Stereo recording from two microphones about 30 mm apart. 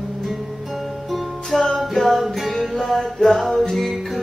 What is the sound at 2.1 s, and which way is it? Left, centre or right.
Music, centre.